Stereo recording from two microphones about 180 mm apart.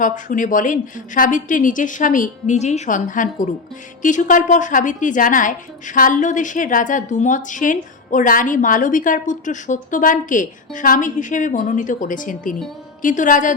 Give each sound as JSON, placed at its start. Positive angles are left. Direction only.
{"t": 0.0, "sound": "a woman's voice", "side_deg": 45}